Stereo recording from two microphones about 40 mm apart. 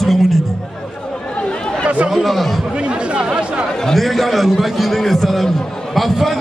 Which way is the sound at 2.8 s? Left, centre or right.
Right.